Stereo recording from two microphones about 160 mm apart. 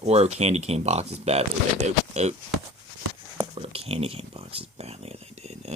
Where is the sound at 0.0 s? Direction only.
40° right (ahead or behind).